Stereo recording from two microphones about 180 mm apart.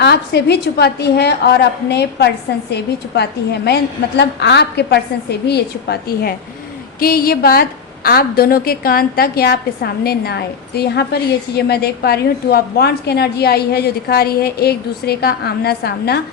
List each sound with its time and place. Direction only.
0.0 s a woman's voice: 70° left (ahead or behind)